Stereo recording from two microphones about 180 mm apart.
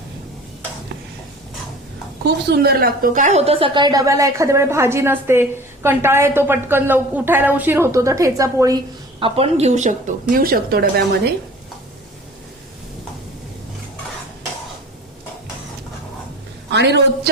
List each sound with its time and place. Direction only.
2.2 s a woman's voice: 65° right (ahead or behind); by 8.8 s 20° right (ahead or behind)
9.2 s a woman's voice: 35° right (ahead or behind)
10.3 s speech: 55° right (ahead or behind)
16.7 s a man's voice: 75° right (ahead or behind)